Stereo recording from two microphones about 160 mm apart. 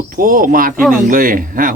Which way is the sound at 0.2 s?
60° right (ahead or behind).